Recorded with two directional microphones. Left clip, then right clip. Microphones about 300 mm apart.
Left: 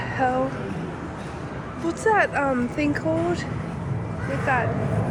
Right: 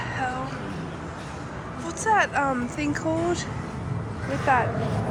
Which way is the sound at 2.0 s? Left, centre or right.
Centre.